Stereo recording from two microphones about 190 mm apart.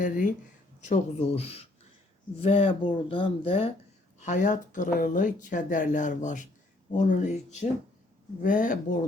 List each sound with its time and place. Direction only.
0.0 s speech: 45° left (ahead or behind)
4.2 s speech: 40° left (ahead or behind)